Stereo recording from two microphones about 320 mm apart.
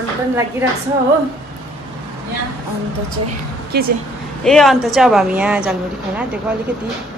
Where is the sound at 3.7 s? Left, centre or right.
Right.